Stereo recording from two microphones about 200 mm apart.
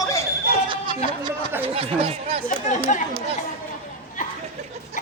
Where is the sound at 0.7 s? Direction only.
25° right (ahead or behind).